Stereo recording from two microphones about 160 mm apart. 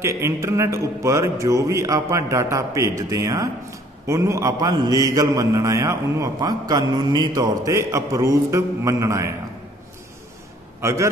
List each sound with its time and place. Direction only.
0.0 s mantra: 15° right (ahead or behind)
10.8 s a man's voice: 20° right (ahead or behind)